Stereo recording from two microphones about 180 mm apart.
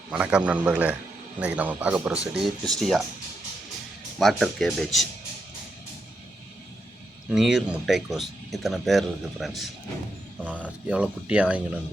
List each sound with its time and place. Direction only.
0.1 s speech: 5° right (ahead or behind)
4.2 s speech: centre (ahead or behind)
7.3 s speech: centre (ahead or behind)